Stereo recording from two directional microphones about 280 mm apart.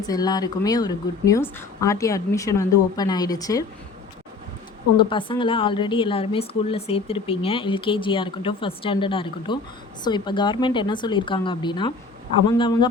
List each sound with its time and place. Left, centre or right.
0.0 s a woman's voice: centre
4.9 s a woman's voice: centre